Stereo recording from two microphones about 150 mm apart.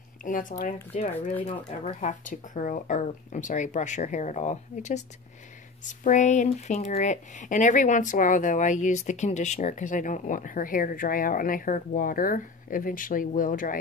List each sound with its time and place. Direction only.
0.2 s speech: 60° left (ahead or behind)
1.9 s speech: 55° left (ahead or behind)